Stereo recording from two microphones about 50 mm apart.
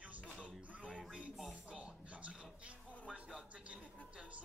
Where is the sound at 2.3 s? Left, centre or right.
Right.